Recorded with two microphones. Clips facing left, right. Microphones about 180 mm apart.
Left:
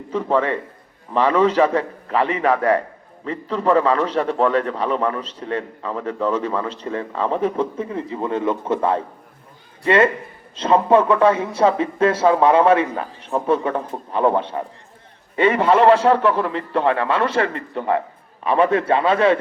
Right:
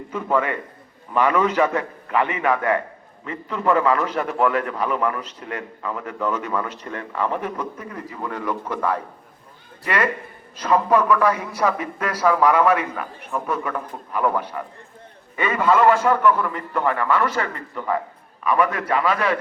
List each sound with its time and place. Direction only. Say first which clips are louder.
0.1 s a man's voice: left 3 dB; 30° left (ahead or behind)